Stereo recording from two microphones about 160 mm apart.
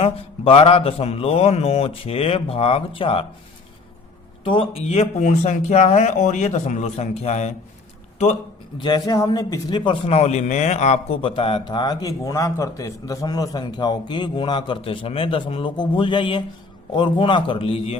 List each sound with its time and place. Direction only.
0.0 s a man's voice: 35° left (ahead or behind)
4.4 s speech: 35° left (ahead or behind)
8.8 s a man's voice: 25° left (ahead or behind)